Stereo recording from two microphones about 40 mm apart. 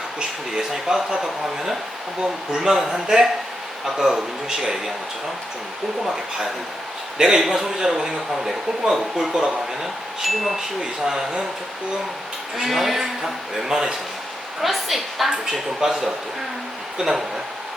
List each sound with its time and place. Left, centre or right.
0.7 s speech: centre
7.2 s speech: centre
10.2 s a woman's voice: centre
11.0 s speech: centre
12.5 s a woman's voice: centre
15.3 s speech: centre